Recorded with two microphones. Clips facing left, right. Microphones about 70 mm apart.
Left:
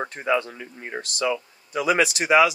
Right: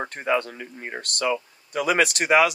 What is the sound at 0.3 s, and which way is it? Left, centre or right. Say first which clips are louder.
Speech: even; right.